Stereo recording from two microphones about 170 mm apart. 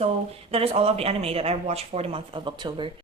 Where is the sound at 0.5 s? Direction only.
35° right (ahead or behind).